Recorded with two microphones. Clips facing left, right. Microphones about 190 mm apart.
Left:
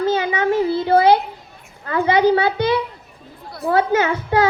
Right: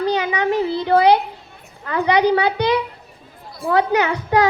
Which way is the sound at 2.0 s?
20° right (ahead or behind).